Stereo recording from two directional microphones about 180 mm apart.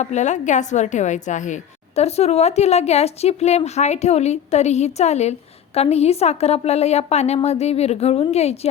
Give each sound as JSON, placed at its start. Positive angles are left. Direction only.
{"t": 0.0, "sound": "a woman's voice", "side_deg": 40}